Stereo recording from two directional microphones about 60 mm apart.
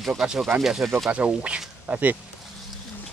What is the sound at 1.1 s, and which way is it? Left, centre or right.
Speech, centre.